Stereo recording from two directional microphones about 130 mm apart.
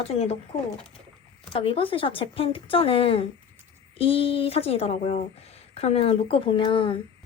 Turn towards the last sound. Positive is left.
turn(degrees=40)  # may be behind; listen again after turning